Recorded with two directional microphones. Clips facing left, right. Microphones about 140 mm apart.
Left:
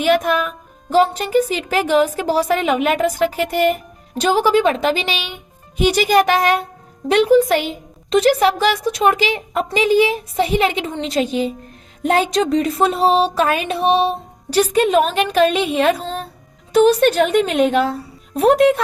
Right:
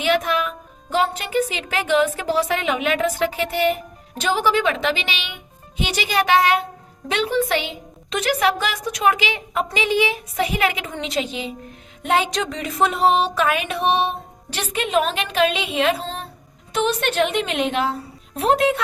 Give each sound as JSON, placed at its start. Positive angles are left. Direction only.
{"t": 0.0, "sound": "a woman's voice", "side_deg": 45}